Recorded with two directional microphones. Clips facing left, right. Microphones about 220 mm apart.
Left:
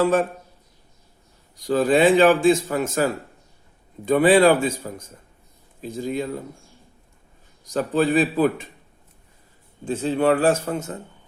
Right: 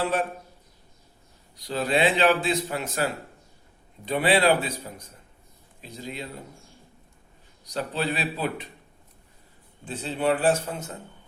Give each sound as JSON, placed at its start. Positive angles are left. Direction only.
{"t": 0.0, "sound": "a man's voice", "side_deg": 45}
{"t": 1.5, "sound": "a man's voice", "side_deg": 45}
{"t": 7.6, "sound": "a man's voice", "side_deg": 50}
{"t": 9.9, "sound": "a man's voice", "side_deg": 45}